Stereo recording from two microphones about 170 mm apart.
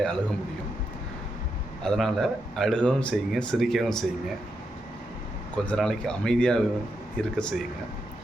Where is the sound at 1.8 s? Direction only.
5° left (ahead or behind).